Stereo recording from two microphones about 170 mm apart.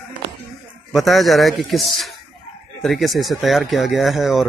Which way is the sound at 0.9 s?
Centre (ahead or behind).